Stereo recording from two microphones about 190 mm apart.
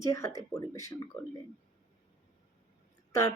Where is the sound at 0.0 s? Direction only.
15° left (ahead or behind).